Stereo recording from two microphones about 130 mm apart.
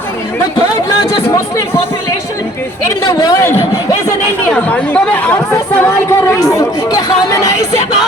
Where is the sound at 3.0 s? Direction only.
30° left (ahead or behind).